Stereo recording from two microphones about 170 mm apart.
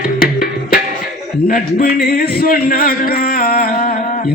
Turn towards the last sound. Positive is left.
turn(degrees=60)  # may be behind; listen again after turning